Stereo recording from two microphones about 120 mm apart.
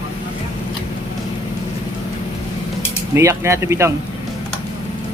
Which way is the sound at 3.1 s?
25° right (ahead or behind).